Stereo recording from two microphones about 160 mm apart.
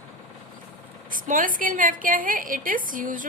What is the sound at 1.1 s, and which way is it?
A woman's voice, 55° right (ahead or behind).